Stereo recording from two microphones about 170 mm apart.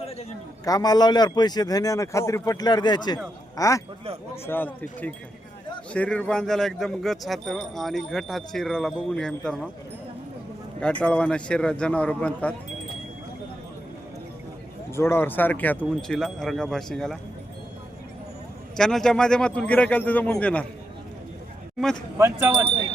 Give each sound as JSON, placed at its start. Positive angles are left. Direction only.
{"t": 0.6, "sound": "a man's voice", "side_deg": 20}
{"t": 10.8, "sound": "speech", "side_deg": 5}
{"t": 14.9, "sound": "speech", "side_deg": 15}
{"t": 18.8, "sound": "speech", "side_deg": 5}
{"t": 22.2, "sound": "speech", "side_deg": -15}